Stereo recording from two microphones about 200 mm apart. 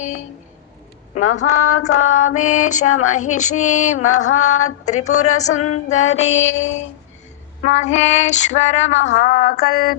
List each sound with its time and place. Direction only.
0.0 s female singing: 35° left (ahead or behind)
2.0 s female singing: 90° left
2.3 s female singing: 35° left (ahead or behind)
2.8 s female singing: 90° left
3.1 s female singing: 40° left (ahead or behind)
6.3 s mantra: 75° left (ahead or behind)
7.7 s female singing: 35° left (ahead or behind)
9.0 s mantra: 70° left (ahead or behind)
9.2 s a sound: 45° left (ahead or behind)